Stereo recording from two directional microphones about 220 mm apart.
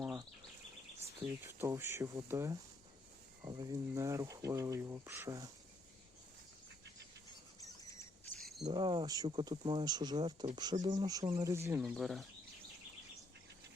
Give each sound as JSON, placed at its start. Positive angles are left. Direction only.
{"t": 1.5, "sound": "speech", "side_deg": -10}
{"t": 7.8, "sound": "squawk", "side_deg": 15}
{"t": 8.4, "sound": "cricket", "side_deg": 0}
{"t": 8.7, "sound": "speech", "side_deg": -20}